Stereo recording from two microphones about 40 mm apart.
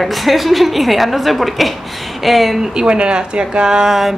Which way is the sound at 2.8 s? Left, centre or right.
Right.